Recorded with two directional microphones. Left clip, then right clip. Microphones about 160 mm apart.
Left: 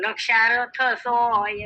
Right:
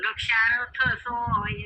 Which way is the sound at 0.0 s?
45° left (ahead or behind).